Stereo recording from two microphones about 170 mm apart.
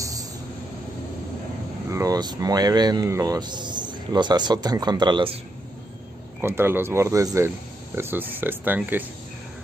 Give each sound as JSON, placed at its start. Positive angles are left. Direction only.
{"t": 0.0, "sound": "vehicle", "side_deg": -20}
{"t": 1.9, "sound": "speech", "side_deg": -20}
{"t": 6.4, "sound": "speech", "side_deg": -15}